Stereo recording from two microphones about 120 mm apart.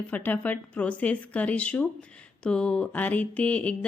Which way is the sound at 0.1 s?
15° left (ahead or behind).